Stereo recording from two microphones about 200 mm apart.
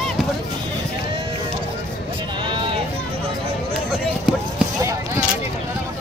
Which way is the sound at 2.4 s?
25° right (ahead or behind).